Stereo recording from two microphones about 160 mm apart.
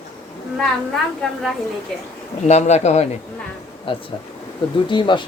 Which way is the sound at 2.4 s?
45° left (ahead or behind).